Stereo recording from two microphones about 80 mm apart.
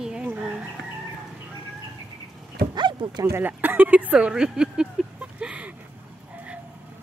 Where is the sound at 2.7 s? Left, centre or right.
Right.